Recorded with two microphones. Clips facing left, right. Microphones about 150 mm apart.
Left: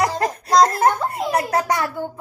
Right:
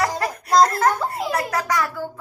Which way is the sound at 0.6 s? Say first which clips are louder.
Left 1 dB; 25° left (ahead or behind).